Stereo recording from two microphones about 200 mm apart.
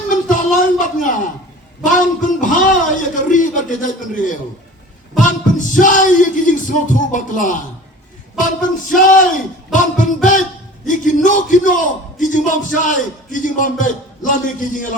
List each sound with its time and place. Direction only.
0.1 s a sound: 40° left (ahead or behind)
1.8 s a man's voice: 40° left (ahead or behind)
9.0 s a man's voice: 40° left (ahead or behind)